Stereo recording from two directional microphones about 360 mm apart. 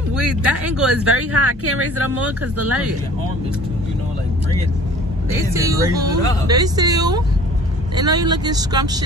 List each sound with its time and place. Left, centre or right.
0.1 s speech: centre
0.9 s speech: right
5.3 s speech: centre